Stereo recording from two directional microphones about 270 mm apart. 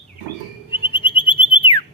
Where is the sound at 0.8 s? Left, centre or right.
Centre.